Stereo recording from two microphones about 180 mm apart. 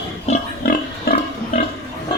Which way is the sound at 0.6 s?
60° left (ahead or behind).